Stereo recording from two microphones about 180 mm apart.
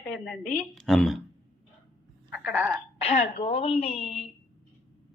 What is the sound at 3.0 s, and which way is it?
A woman's voice, 30° left (ahead or behind).